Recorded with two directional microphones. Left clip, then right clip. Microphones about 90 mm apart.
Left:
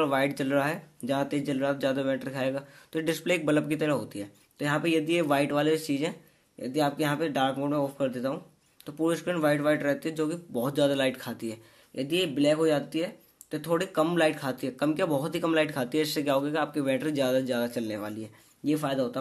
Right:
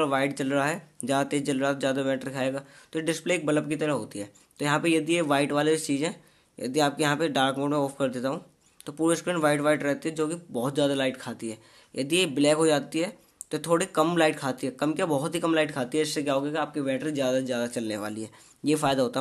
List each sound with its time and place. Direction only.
0.0 s speech: 10° right (ahead or behind)
1.0 s speech: 30° right (ahead or behind)
4.6 s speech: 40° right (ahead or behind)
6.6 s speech: 50° right (ahead or behind); by 11.5 s 20° right (ahead or behind)
11.9 s speech: 45° right (ahead or behind); by 17.6 s centre (ahead or behind)
17.8 s speech: 30° right (ahead or behind)
18.7 s speech: 65° right (ahead or behind)